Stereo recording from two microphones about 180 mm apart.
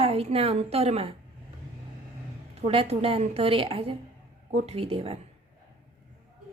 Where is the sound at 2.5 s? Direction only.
30° right (ahead or behind).